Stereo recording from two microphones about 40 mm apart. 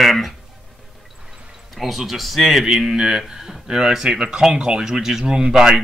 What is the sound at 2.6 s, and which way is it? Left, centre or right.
Speech, centre.